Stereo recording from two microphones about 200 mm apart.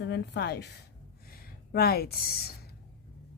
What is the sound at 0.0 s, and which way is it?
A woman's voice, 55° left (ahead or behind).